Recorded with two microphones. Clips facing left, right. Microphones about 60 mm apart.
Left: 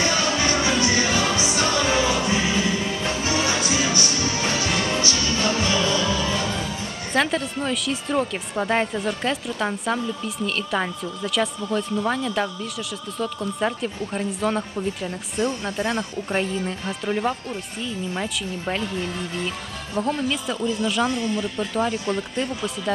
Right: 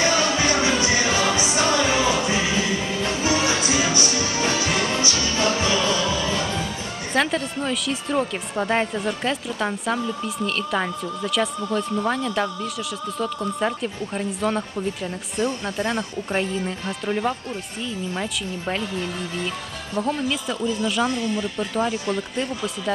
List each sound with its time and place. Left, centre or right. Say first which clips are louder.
0.0 s music: right 2 dB; centre
7.1 s speech: even; centre
13.6 s speech: left 2 dB; centre
19.9 s speech: even; centre